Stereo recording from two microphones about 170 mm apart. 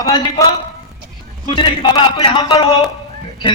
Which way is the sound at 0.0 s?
20° left (ahead or behind).